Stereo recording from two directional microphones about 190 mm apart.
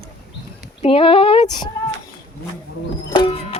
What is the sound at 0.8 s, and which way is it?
Speech, 30° left (ahead or behind).